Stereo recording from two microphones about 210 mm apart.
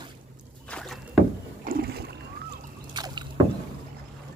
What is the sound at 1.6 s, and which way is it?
Boat, 45° right (ahead or behind).